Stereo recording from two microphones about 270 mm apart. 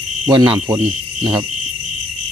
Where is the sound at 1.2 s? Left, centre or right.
Centre.